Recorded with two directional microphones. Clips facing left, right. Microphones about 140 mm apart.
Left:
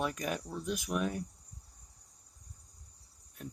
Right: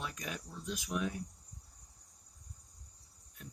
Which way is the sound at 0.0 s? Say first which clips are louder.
Left 8 dB; 55° left (ahead or behind).